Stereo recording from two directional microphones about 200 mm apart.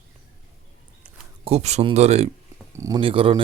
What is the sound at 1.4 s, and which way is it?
Speech, 30° right (ahead or behind).